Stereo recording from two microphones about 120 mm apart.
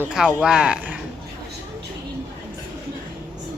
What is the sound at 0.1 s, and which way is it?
Speech, 5° right (ahead or behind).